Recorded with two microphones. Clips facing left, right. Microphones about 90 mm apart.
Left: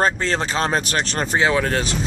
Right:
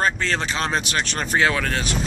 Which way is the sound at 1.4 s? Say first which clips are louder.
Left 2 dB; 25° left (ahead or behind).